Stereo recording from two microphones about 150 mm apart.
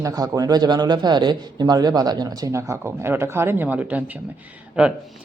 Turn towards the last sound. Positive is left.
turn(degrees=-5)  # may be behind; listen again after turning